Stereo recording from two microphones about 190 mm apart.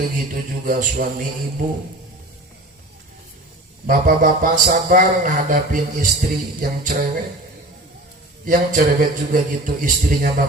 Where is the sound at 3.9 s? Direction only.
45° right (ahead or behind).